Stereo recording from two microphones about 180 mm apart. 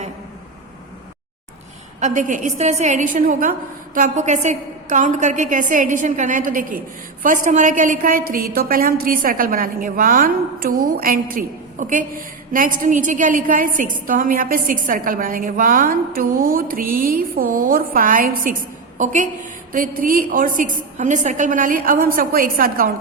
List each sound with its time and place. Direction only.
2.0 s a woman's voice: 45° right (ahead or behind)